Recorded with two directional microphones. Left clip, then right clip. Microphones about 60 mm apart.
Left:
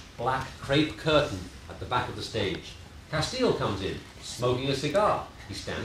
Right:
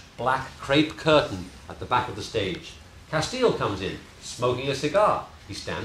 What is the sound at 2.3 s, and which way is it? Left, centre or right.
Speech, centre.